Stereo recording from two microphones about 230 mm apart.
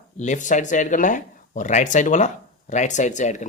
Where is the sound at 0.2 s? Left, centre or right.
Left.